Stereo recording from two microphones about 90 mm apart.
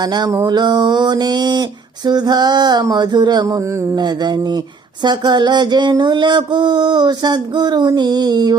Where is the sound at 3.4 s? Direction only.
35° right (ahead or behind).